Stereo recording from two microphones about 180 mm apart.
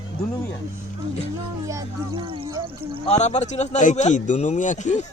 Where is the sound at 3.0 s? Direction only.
40° left (ahead or behind).